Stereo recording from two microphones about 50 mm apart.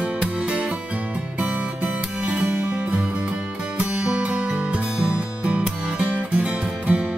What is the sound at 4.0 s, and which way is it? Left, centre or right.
Music, right.